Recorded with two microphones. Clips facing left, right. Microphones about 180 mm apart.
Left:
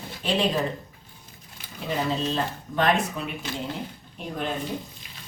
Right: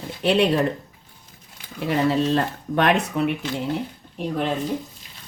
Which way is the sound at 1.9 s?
70° right (ahead or behind).